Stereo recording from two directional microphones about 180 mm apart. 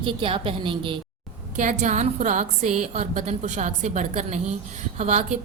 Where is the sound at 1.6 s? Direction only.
45° right (ahead or behind).